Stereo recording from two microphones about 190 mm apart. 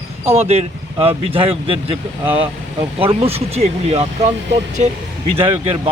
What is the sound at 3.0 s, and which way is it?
A man's voice, 30° right (ahead or behind).